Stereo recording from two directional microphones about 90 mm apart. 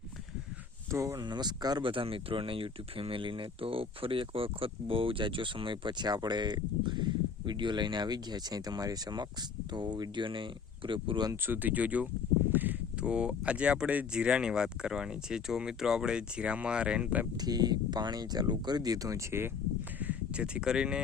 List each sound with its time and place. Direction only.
0.9 s speech: 35° right (ahead or behind)
1.2 s speech: 55° right (ahead or behind)
1.8 s speech: 75° right (ahead or behind)
11.4 s speech: 20° right (ahead or behind)
17.3 s speech: 50° right (ahead or behind)
20.0 s speech: 15° right (ahead or behind)